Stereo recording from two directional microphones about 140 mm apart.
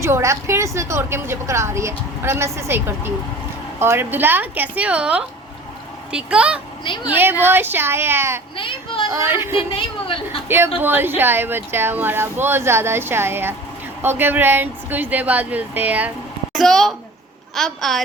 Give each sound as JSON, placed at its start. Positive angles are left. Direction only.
{"t": 0.0, "sound": "a woman's voice", "side_deg": -20}
{"t": 6.8, "sound": "speech", "side_deg": 35}
{"t": 7.1, "sound": "speech", "side_deg": -15}
{"t": 8.5, "sound": "speech", "side_deg": 40}
{"t": 9.0, "sound": "a woman's voice", "side_deg": -20}
{"t": 16.6, "sound": "a woman's voice", "side_deg": 0}